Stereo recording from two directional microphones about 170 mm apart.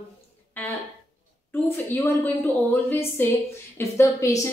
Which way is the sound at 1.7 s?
10° left (ahead or behind).